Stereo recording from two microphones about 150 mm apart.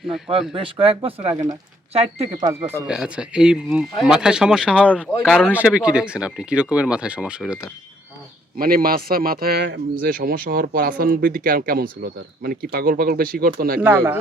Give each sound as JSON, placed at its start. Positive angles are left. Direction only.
{"t": 0.5, "sound": "speech", "side_deg": -40}
{"t": 2.6, "sound": "speech", "side_deg": -15}
{"t": 2.8, "sound": "speech", "side_deg": -5}
{"t": 8.5, "sound": "a man's voice", "side_deg": -75}
{"t": 13.8, "sound": "speech", "side_deg": -15}